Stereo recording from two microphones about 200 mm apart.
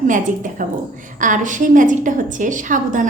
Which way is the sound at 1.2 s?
40° right (ahead or behind).